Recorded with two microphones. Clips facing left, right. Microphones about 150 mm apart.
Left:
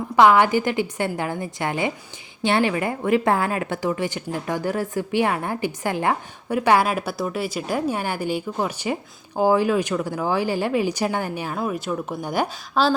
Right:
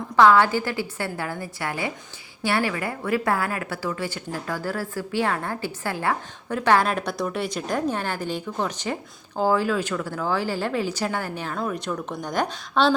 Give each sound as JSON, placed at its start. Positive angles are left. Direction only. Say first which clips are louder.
{"t": 0.2, "sound": "a woman's voice", "louder": "left 1 dB", "side_deg": 15}